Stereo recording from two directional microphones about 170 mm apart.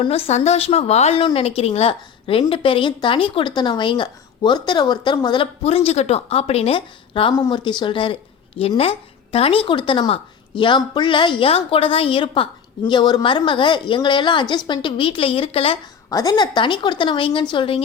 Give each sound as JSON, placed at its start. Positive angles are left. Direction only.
{"t": 0.0, "sound": "a woman's voice", "side_deg": 35}
{"t": 16.0, "sound": "a woman's voice", "side_deg": 20}